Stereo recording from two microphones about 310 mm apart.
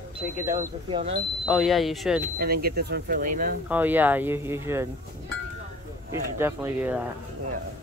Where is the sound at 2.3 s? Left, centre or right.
Right.